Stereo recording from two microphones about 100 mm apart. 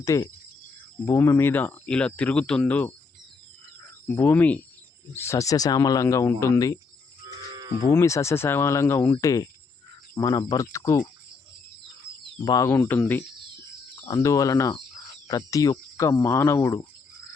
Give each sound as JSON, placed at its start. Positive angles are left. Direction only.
{"t": 0.0, "sound": "speech", "side_deg": 35}
{"t": 4.1, "sound": "speech", "side_deg": 25}
{"t": 7.8, "sound": "speech", "side_deg": 30}
{"t": 9.2, "sound": "speech", "side_deg": 35}
{"t": 10.5, "sound": "speech", "side_deg": 30}
{"t": 12.6, "sound": "speech", "side_deg": 20}
{"t": 14.0, "sound": "speech", "side_deg": 30}